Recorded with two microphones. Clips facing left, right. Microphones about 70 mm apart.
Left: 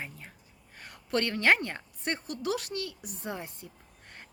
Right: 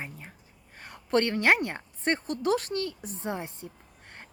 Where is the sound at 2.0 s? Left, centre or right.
Right.